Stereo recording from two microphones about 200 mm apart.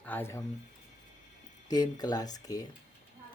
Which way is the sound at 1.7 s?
20° left (ahead or behind).